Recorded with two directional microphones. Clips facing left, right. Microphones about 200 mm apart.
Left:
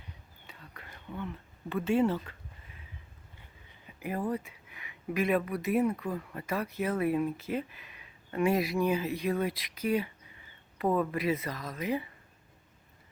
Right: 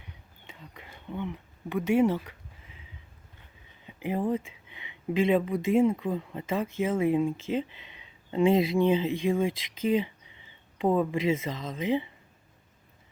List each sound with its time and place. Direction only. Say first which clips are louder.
0.4 s speech: right 3 dB; 20° right (ahead or behind)
3.8 s speech: right 4 dB; 20° right (ahead or behind)